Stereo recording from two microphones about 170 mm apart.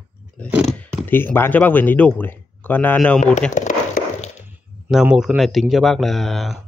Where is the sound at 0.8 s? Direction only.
10° left (ahead or behind).